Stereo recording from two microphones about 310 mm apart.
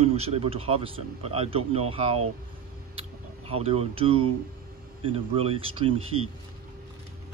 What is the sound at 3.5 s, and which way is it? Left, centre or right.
Speech, centre.